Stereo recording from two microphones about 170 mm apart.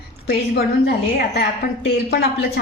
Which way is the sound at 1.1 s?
65° left (ahead or behind).